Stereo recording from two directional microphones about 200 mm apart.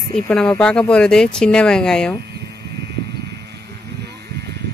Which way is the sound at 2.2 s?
55° right (ahead or behind).